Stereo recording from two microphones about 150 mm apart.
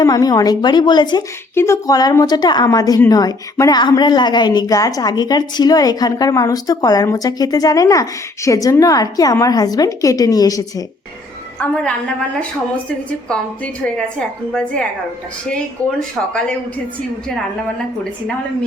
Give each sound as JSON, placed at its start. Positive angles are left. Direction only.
{"t": 0.0, "sound": "a woman's voice", "side_deg": 25}
{"t": 1.5, "sound": "a woman's voice", "side_deg": 20}
{"t": 11.6, "sound": "a woman's voice", "side_deg": 5}